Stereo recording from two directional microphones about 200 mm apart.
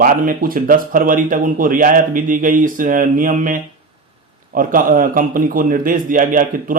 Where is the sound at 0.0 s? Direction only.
45° right (ahead or behind).